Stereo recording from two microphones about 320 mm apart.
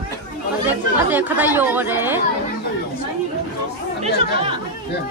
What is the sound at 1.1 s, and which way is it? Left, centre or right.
Speech, centre.